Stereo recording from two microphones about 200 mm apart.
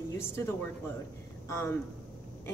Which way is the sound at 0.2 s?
10° left (ahead or behind).